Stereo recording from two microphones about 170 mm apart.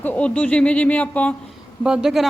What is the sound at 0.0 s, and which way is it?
Speech, 10° left (ahead or behind).